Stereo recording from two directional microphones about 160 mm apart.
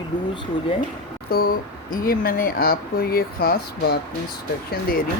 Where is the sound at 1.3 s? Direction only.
65° left (ahead or behind).